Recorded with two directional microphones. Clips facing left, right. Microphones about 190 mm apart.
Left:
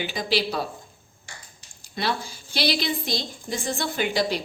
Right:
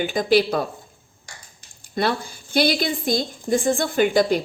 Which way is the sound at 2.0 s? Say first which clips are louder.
Right 5 dB; 55° right (ahead or behind).